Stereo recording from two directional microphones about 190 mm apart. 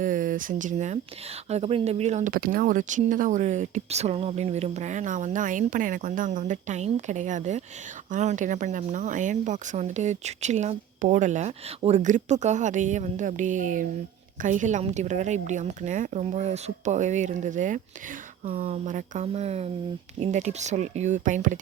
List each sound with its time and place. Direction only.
0.0 s speech: 45° right (ahead or behind)